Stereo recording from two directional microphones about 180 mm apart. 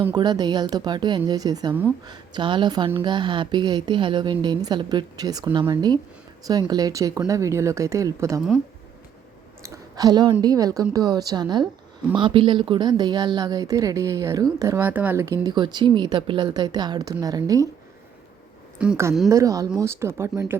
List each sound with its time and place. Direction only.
0.0 s a woman's voice: 20° right (ahead or behind)
9.6 s a sound: 20° right (ahead or behind)
10.4 s a woman's voice: 20° right (ahead or behind)
18.8 s a woman's voice: 10° right (ahead or behind)